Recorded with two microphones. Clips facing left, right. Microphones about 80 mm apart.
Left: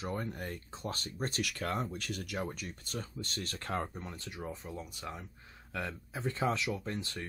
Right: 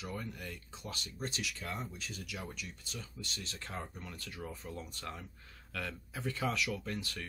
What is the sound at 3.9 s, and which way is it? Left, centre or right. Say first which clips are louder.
Speech: left 3 dB; left.